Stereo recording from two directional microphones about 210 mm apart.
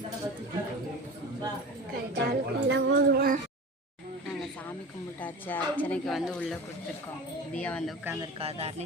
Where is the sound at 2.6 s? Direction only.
55° right (ahead or behind).